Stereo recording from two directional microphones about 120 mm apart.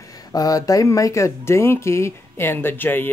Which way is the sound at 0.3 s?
30° left (ahead or behind).